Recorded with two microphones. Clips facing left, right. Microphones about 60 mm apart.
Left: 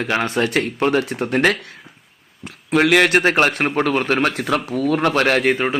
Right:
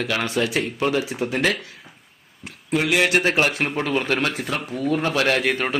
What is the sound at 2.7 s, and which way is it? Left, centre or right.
Speech, left.